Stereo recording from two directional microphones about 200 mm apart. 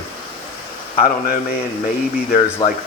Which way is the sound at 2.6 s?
20° left (ahead or behind).